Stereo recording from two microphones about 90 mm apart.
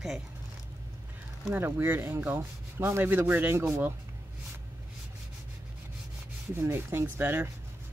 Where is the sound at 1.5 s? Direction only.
25° right (ahead or behind).